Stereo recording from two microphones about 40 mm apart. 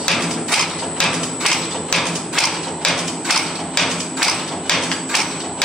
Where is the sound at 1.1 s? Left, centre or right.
Centre.